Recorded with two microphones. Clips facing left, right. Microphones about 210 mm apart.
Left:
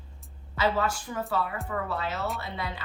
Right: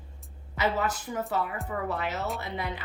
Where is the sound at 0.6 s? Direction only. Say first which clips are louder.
Left 1 dB; 20° right (ahead or behind).